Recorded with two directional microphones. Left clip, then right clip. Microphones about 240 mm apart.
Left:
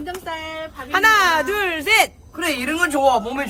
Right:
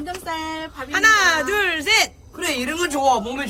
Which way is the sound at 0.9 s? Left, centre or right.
Centre.